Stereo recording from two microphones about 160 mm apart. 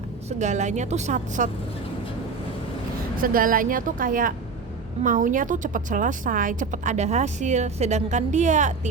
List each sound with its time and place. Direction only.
0.3 s a woman's voice: 45° right (ahead or behind)
3.2 s a woman's voice: 60° right (ahead or behind)